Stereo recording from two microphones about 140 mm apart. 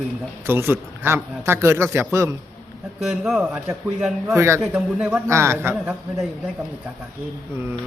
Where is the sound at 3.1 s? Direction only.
5° right (ahead or behind).